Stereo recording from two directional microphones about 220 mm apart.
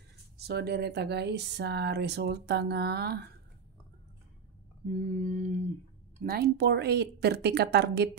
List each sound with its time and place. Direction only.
0.4 s speech: 45° right (ahead or behind)
5.0 s mantra: 35° right (ahead or behind)
6.1 s speech: 45° right (ahead or behind)